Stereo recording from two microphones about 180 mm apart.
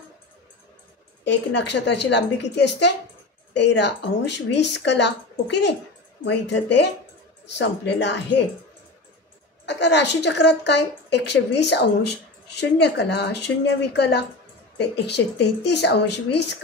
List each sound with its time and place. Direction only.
1.2 s speech: 75° left (ahead or behind)
9.7 s speech: 75° left (ahead or behind)